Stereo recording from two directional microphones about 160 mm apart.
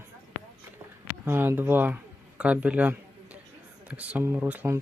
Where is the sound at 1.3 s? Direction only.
15° right (ahead or behind).